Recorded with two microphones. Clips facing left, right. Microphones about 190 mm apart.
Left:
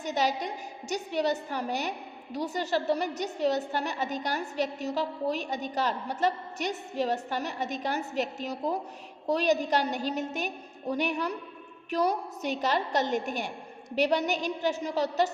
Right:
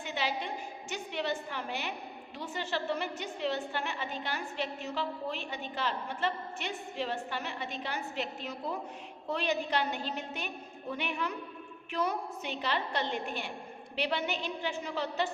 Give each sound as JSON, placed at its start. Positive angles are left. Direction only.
{"t": 0.0, "sound": "a woman's voice", "side_deg": 40}